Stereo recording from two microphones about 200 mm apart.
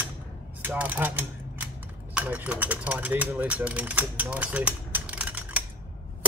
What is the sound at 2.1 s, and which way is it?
Speech, 10° right (ahead or behind).